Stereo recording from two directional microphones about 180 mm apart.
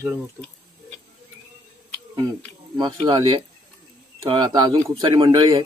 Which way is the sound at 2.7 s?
25° right (ahead or behind).